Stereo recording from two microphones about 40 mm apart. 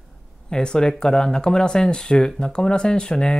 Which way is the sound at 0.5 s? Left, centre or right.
Centre.